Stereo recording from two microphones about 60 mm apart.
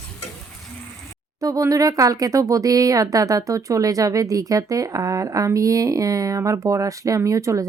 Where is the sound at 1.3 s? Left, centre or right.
Right.